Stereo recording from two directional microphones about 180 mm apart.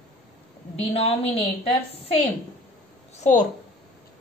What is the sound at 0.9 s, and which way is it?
A woman's voice, 30° left (ahead or behind).